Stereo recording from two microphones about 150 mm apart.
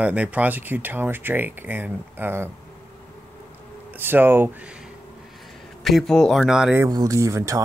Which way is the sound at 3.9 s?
15° right (ahead or behind).